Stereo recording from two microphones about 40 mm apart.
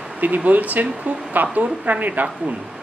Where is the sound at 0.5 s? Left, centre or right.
Right.